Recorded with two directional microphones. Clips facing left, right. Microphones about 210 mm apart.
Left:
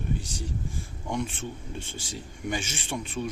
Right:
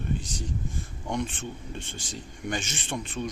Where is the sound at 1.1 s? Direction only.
5° left (ahead or behind).